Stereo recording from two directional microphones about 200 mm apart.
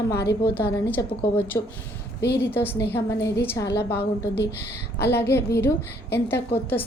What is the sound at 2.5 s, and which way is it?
A woman's voice, 10° left (ahead or behind).